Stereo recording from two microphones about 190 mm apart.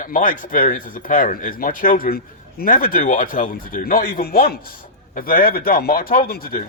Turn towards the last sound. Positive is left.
turn(degrees=50)  # may be behind; listen again after turning